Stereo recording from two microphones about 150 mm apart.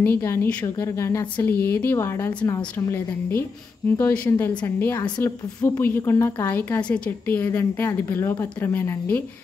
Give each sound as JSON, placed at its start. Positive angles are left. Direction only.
{"t": 0.0, "sound": "a woman's voice", "side_deg": 15}